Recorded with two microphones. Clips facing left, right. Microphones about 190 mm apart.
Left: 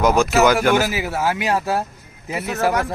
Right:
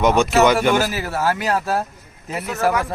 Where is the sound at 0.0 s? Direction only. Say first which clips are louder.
Even; centre (ahead or behind).